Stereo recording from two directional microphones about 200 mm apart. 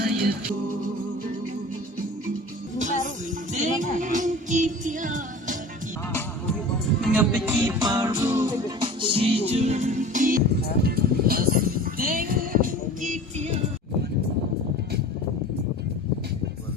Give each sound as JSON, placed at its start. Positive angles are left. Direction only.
{"t": 3.5, "sound": "music", "side_deg": -40}
{"t": 7.0, "sound": "music", "side_deg": -5}